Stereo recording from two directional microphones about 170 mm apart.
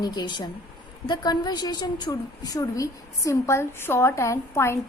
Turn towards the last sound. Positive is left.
turn(degrees=15)  # may be behind; listen again after turning